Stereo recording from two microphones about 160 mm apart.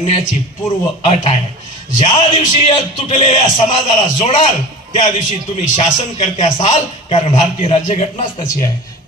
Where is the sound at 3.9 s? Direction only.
50° left (ahead or behind).